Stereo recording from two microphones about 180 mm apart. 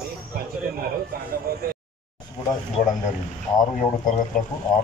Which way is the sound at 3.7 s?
40° left (ahead or behind).